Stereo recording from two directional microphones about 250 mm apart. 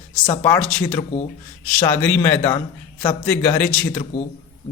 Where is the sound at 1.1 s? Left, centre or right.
Left.